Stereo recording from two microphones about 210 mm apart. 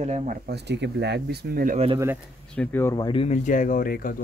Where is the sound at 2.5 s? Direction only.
5° left (ahead or behind); by 4.1 s 45° left (ahead or behind).